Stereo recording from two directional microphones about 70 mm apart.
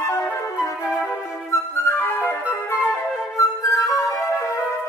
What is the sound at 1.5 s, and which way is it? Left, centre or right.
Flute, left.